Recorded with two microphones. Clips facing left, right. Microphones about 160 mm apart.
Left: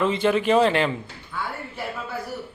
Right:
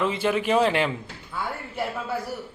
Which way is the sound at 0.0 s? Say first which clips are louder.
Left 3 dB; 5° right (ahead or behind).